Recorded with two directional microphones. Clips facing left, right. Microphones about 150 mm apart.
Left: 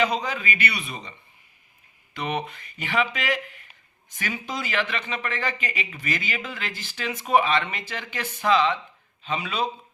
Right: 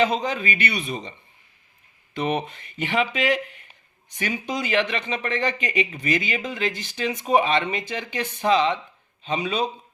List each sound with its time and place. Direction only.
0.0 s speech: 25° right (ahead or behind)
2.4 s speech: 25° right (ahead or behind)